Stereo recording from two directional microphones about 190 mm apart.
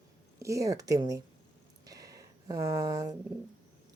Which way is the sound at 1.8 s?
20° right (ahead or behind).